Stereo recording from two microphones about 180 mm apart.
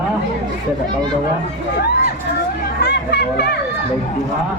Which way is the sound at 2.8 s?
65° left (ahead or behind).